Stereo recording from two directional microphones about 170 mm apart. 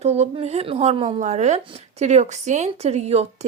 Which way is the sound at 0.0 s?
40° right (ahead or behind).